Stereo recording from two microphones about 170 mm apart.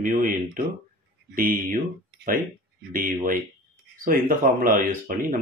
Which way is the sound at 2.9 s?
55° right (ahead or behind).